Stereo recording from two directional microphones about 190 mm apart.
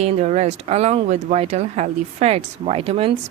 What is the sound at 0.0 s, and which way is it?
Speech, 35° right (ahead or behind).